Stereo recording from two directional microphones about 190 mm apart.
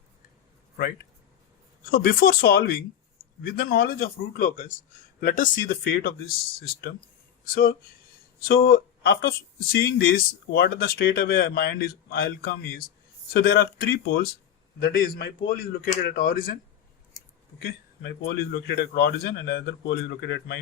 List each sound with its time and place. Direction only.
1.9 s a man's voice: 50° left (ahead or behind)
17.2 s a sound: 20° left (ahead or behind)
17.6 s a man's voice: 50° left (ahead or behind)